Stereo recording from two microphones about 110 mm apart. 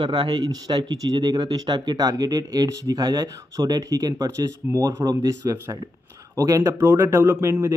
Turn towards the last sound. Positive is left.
turn(degrees=-25)  # may be behind; listen again after turning